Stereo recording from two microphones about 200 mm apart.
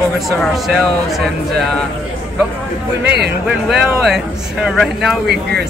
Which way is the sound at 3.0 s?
55° right (ahead or behind).